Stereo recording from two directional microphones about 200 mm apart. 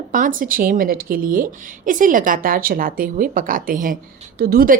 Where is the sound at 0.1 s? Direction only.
45° right (ahead or behind).